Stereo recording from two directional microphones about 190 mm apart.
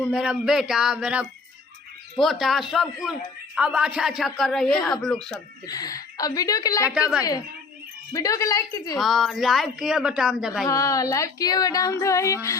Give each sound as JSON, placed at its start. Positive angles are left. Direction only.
{"t": 0.1, "sound": "a man's voice", "side_deg": -5}
{"t": 5.6, "sound": "a woman's voice", "side_deg": 20}
{"t": 6.9, "sound": "a man's voice", "side_deg": -5}
{"t": 7.2, "sound": "a woman's voice", "side_deg": 20}
{"t": 9.0, "sound": "a man's voice", "side_deg": 0}
{"t": 10.7, "sound": "speech", "side_deg": 15}